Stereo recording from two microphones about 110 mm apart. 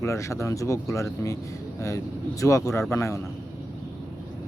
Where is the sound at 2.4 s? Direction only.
30° left (ahead or behind).